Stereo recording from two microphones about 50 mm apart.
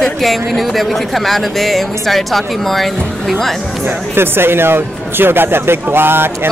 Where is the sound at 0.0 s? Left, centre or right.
Centre.